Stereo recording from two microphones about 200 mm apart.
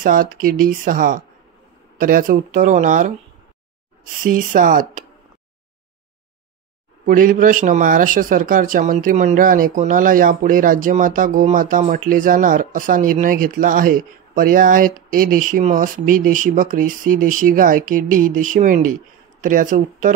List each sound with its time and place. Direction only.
0.0 s speech: 45° right (ahead or behind)
7.1 s speech: 45° right (ahead or behind)